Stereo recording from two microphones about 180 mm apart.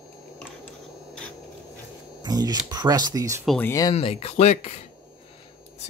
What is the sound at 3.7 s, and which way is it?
Speech, 20° left (ahead or behind).